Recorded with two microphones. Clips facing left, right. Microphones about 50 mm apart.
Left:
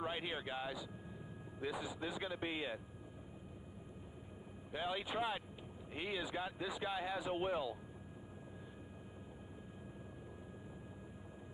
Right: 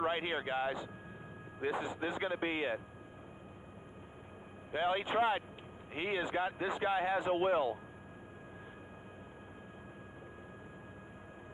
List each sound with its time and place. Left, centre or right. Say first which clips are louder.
0.0 s speech: right 7 dB; right
4.7 s speech: right 8 dB; right